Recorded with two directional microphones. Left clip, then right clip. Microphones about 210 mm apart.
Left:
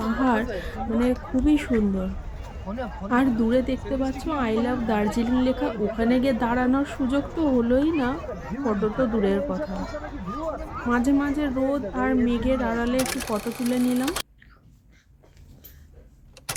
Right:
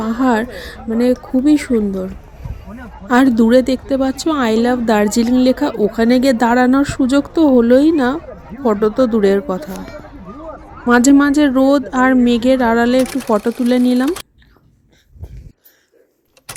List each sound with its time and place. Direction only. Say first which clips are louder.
0.0 s a woman's voice: right 7 dB; 35° right (ahead or behind)
3.1 s a woman's voice: right 11 dB; 40° right (ahead or behind)
10.8 s speech: right 13 dB; 50° right (ahead or behind)
13.0 s speech: right 11 dB; centre (ahead or behind)
16.5 s vehicle: even; centre (ahead or behind)